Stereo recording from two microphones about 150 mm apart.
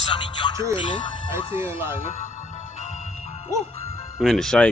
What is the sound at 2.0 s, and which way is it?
Music, 50° left (ahead or behind).